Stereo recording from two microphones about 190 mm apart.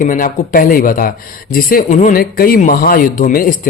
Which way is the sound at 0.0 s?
45° left (ahead or behind).